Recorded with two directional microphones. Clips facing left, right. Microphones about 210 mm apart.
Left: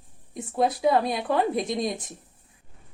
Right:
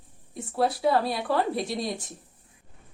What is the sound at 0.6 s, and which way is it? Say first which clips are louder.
Speech: left 2 dB; 20° left (ahead or behind).